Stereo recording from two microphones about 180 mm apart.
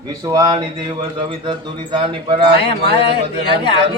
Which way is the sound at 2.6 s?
30° left (ahead or behind).